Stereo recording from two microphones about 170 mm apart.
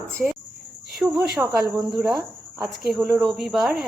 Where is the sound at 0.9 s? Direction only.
5° right (ahead or behind).